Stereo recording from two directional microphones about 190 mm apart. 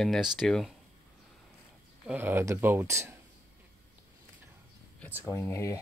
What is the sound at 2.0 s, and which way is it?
Speech, 10° right (ahead or behind).